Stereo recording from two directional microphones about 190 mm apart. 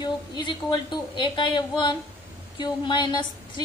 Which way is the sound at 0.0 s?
25° left (ahead or behind).